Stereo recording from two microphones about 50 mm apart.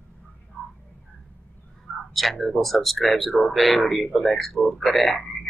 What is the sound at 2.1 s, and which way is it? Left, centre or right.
Speech, centre.